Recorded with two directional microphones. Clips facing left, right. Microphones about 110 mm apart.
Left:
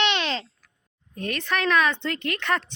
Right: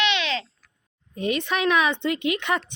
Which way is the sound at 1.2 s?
15° right (ahead or behind).